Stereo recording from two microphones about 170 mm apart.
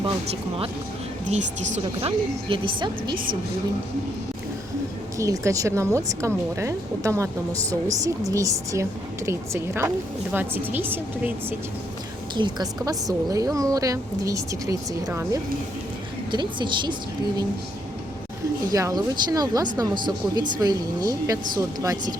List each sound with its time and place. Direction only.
2.0 s a woman's voice: 30° right (ahead or behind)
5.1 s speech: 20° right (ahead or behind)
12.3 s a woman's voice: 25° right (ahead or behind)
16.3 s a woman's voice: 25° right (ahead or behind)
18.7 s a woman's voice: 20° right (ahead or behind)